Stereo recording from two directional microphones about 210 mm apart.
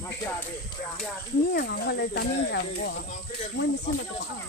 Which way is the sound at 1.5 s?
50° left (ahead or behind).